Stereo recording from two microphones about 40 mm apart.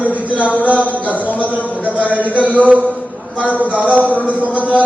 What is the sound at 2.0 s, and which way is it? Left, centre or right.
Speech, right.